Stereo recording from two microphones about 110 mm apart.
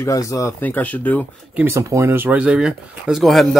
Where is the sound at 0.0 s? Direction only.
30° left (ahead or behind).